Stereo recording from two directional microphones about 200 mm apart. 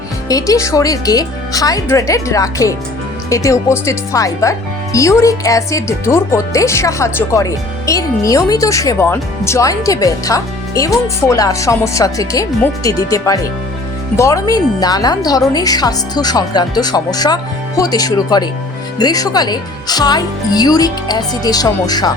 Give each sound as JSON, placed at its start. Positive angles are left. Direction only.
{"t": 0.3, "sound": "a woman's voice", "side_deg": 15}